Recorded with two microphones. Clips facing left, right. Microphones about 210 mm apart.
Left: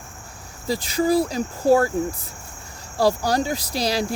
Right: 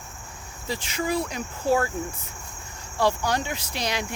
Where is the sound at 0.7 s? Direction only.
35° left (ahead or behind).